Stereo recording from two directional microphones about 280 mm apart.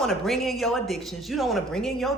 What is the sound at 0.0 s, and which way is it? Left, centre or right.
Speech, centre.